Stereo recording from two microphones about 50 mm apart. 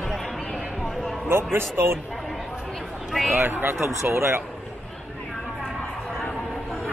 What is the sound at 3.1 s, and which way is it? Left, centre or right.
Speech, centre.